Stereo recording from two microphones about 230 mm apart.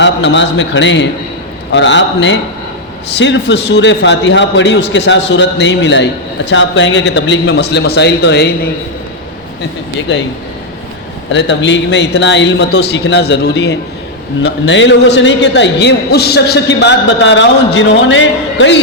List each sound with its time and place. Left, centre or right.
0.0 s a man's voice: left
10.1 s a man's voice: left
11.3 s a man's voice: left